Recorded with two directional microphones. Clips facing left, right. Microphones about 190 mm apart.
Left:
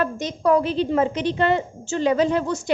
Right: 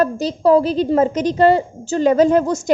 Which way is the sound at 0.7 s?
40° right (ahead or behind).